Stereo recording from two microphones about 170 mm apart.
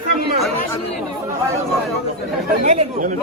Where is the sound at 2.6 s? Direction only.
50° right (ahead or behind).